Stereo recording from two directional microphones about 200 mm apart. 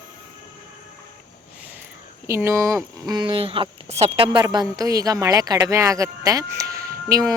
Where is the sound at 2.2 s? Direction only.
15° right (ahead or behind).